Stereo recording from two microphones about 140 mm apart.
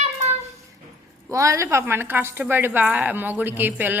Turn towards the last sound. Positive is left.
turn(degrees=-15)  # may be behind; listen again after turning